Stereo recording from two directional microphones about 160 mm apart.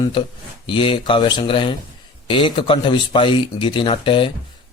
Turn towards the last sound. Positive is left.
turn(degrees=30)  # may be behind; listen again after turning